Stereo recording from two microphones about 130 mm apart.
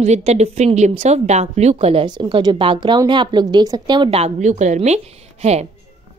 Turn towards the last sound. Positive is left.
turn(degrees=-55)  # may be behind; listen again after turning